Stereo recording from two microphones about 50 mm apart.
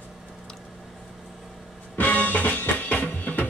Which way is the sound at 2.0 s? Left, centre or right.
Left.